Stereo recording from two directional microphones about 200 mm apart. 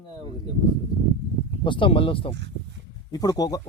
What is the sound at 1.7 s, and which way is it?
Speech, 25° left (ahead or behind).